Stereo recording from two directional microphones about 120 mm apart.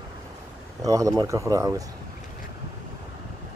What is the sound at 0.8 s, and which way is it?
Speech, 25° right (ahead or behind).